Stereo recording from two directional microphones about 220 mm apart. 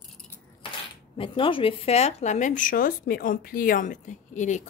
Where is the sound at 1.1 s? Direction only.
25° left (ahead or behind).